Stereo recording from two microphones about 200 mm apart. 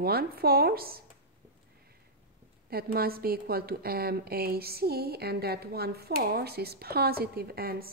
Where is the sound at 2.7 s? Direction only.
50° right (ahead or behind).